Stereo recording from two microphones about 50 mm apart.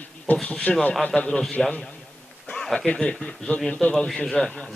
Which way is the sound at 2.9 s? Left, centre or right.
Left.